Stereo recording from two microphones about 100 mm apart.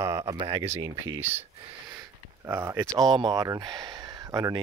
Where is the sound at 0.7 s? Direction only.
30° right (ahead or behind).